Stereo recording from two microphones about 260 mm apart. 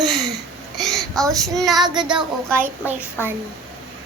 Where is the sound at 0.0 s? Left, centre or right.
Centre.